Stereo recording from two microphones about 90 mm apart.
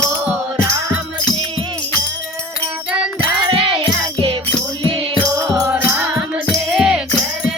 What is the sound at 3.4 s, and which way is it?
Music, 70° right (ahead or behind).